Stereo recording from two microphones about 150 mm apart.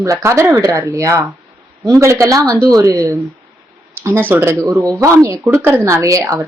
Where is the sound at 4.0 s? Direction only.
15° right (ahead or behind).